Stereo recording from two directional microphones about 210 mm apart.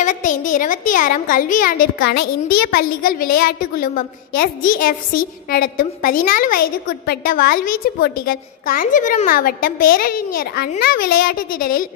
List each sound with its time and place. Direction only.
0.0 s a woman's voice: 35° left (ahead or behind)